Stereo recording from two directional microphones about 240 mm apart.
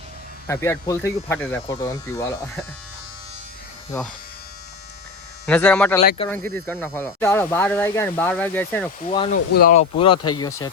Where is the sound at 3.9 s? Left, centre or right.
Centre.